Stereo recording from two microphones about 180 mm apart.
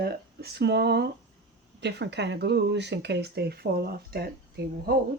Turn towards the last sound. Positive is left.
turn(degrees=-60)  # may be behind; listen again after turning